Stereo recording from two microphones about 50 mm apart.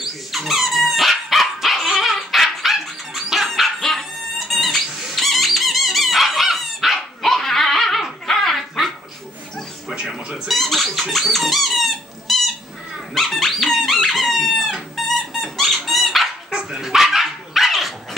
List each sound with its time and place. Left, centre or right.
0.0 s dog: centre
3.4 s dog: centre
4.5 s squeak: centre
8.3 s dog: centre
10.0 s cat: centre
10.5 s squeak: centre
15.0 s dog: centre